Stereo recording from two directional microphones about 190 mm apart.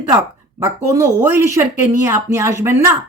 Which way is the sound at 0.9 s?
15° right (ahead or behind).